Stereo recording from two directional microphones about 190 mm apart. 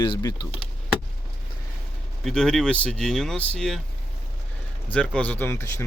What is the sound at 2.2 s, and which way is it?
Speech, 5° left (ahead or behind).